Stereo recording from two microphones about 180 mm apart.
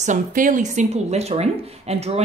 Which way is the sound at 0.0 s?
45° right (ahead or behind).